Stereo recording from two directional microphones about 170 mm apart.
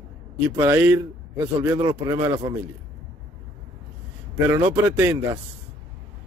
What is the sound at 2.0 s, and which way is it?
Speech, 15° right (ahead or behind).